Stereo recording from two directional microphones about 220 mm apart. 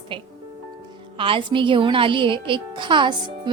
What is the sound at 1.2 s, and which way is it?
A woman's voice, 25° right (ahead or behind).